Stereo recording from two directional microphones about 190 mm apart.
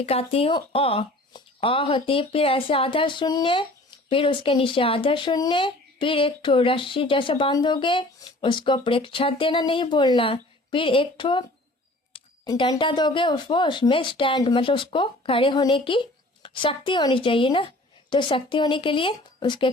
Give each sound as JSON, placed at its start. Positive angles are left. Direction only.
{"t": 0.0, "sound": "speech", "side_deg": 30}